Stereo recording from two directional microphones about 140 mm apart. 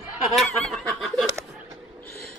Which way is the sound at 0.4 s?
Centre (ahead or behind).